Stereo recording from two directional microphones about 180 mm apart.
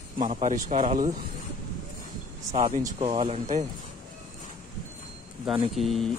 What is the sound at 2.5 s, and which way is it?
Speech, 40° right (ahead or behind).